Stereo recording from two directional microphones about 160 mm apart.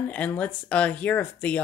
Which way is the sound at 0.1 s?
10° left (ahead or behind).